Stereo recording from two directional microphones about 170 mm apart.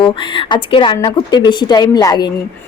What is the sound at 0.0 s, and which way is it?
A woman's voice, 30° left (ahead or behind).